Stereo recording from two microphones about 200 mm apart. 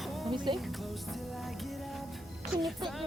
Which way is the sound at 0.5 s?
Centre (ahead or behind).